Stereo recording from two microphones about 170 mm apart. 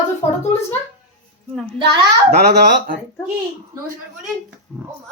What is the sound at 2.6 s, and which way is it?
Speech, 60° right (ahead or behind).